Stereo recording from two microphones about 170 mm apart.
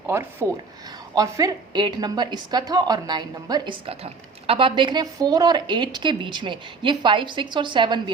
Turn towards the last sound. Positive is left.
turn(degrees=-30)  # may be behind; listen again after turning